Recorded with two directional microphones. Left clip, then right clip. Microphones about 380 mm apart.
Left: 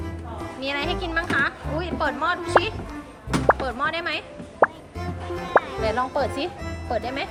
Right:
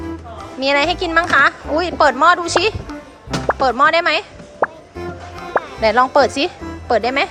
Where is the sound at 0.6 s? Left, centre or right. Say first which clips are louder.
Right 11 dB; centre.